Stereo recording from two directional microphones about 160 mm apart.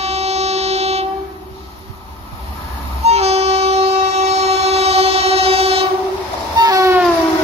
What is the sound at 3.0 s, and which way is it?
Train, 40° right (ahead or behind).